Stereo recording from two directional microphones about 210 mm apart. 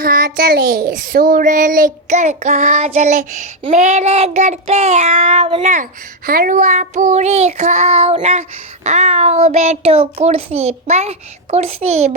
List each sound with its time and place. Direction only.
0.0 s a child's voice: 45° right (ahead or behind); by 5.6 s 25° right (ahead or behind)
5.6 s a child's voice: 40° right (ahead or behind)